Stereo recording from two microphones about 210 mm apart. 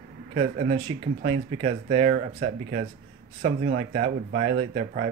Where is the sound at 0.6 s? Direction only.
25° right (ahead or behind).